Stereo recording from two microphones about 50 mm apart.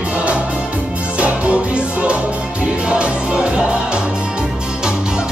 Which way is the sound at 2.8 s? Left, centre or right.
Right.